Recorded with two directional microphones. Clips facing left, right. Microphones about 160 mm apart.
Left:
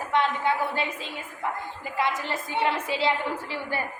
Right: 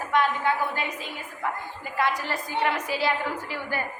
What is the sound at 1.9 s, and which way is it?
A woman's voice, 20° left (ahead or behind).